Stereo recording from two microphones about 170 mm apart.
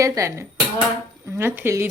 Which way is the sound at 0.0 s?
20° right (ahead or behind).